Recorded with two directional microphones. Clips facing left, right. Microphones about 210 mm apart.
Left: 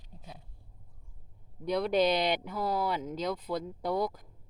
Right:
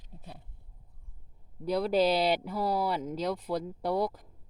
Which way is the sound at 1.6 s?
5° right (ahead or behind).